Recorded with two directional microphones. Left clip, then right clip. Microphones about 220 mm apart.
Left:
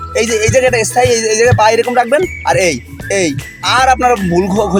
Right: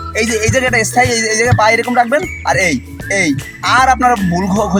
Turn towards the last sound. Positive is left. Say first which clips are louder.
# left 3 dB
turn(degrees=20)  # may be behind; listen again after turning